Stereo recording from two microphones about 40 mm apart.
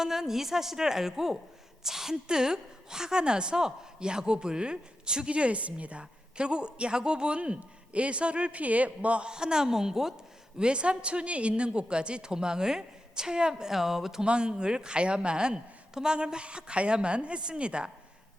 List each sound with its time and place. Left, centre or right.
0.0 s a woman's voice: centre; by 8.6 s right
8.6 s a man's voice: right
9.3 s a woman's voice: centre
10.6 s a woman's voice: right; by 14.2 s centre
14.2 s a woman's voice: right